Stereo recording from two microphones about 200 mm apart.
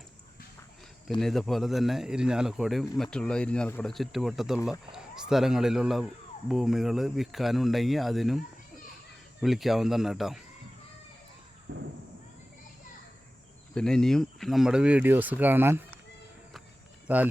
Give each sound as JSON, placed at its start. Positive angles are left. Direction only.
{"t": 1.2, "sound": "speech", "side_deg": 0}
{"t": 9.4, "sound": "speech", "side_deg": 0}
{"t": 11.7, "sound": "a sound", "side_deg": -65}
{"t": 13.7, "sound": "speech", "side_deg": 5}
{"t": 17.1, "sound": "speech", "side_deg": -5}